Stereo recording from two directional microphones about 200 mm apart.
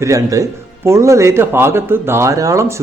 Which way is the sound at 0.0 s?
15° right (ahead or behind).